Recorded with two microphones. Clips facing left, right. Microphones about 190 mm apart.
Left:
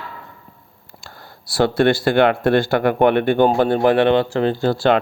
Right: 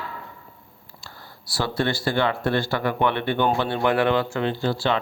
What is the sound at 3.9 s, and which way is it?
Speech, 25° left (ahead or behind).